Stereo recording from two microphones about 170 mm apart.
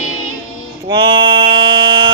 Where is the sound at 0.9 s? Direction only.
25° right (ahead or behind).